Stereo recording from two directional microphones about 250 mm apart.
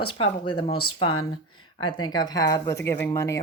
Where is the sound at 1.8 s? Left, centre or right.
Centre.